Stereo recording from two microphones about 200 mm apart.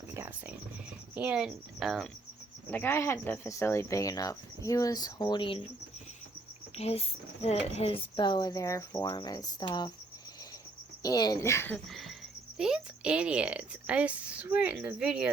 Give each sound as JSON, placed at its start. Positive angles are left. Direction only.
{"t": 0.1, "sound": "whispering", "side_deg": -10}
{"t": 1.1, "sound": "speech", "side_deg": -5}
{"t": 2.6, "sound": "speech", "side_deg": 10}
{"t": 6.7, "sound": "speech", "side_deg": 30}
{"t": 11.0, "sound": "speech", "side_deg": 20}